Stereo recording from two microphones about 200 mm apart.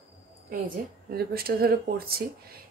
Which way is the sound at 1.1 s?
50° right (ahead or behind).